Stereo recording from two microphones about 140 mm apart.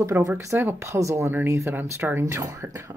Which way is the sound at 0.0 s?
15° right (ahead or behind).